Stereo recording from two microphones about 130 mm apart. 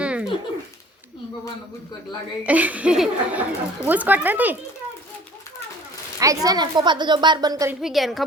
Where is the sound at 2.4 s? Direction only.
10° right (ahead or behind).